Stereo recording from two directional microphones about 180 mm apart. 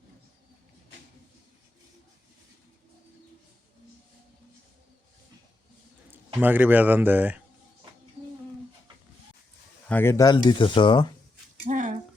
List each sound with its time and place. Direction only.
6.1 s speech: 10° right (ahead or behind)
9.9 s speech: 15° left (ahead or behind)
11.6 s a sound: 45° right (ahead or behind)